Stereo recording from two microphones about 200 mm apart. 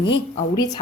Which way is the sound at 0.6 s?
20° left (ahead or behind).